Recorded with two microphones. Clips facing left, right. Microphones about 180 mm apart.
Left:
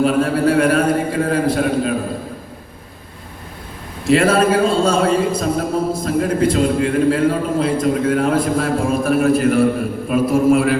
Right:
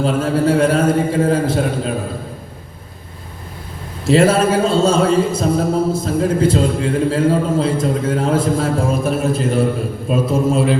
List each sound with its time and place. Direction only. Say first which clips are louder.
0.0 s a man's voice: left 1 dB; 25° right (ahead or behind)
4.0 s a man's voice: right 1 dB; 25° right (ahead or behind)